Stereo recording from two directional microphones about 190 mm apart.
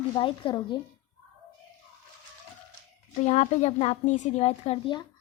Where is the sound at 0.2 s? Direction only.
25° left (ahead or behind).